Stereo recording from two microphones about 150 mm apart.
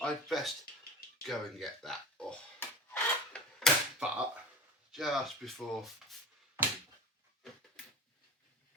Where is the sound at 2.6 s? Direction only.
10° left (ahead or behind).